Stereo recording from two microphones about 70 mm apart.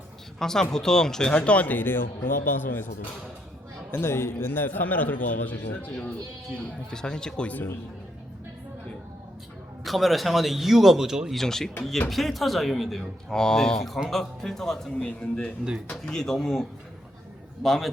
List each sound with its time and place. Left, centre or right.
0.3 s speech: centre; by 2.8 s left
3.9 s a man's voice: left
6.9 s speech: centre
9.8 s speech: centre
11.3 s speech: centre
15.0 s a man's voice: centre
15.9 s speech: centre